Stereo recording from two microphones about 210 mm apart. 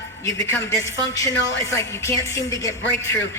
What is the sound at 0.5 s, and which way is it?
Speech, 15° left (ahead or behind).